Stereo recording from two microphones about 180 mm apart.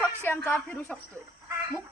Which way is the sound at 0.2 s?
10° left (ahead or behind).